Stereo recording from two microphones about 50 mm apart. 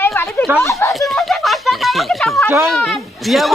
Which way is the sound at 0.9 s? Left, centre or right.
Centre.